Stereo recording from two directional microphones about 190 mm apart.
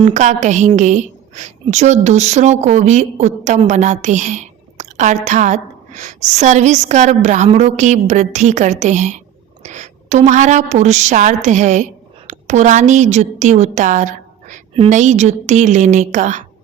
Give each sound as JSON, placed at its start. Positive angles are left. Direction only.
{"t": 0.0, "sound": "a woman's voice", "side_deg": -40}